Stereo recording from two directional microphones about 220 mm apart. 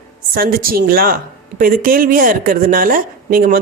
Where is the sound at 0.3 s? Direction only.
40° right (ahead or behind).